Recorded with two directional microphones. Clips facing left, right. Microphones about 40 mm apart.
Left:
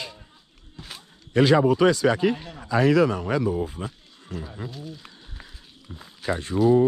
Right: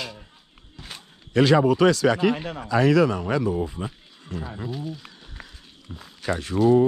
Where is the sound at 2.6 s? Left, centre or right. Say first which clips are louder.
Even; right.